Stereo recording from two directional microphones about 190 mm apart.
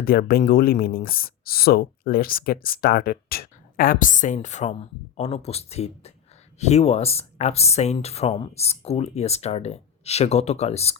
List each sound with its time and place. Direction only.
0.0 s speech: 50° left (ahead or behind); by 10.9 s 35° left (ahead or behind)